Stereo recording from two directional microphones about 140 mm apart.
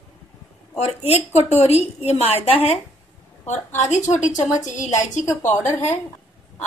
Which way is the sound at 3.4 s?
55° left (ahead or behind).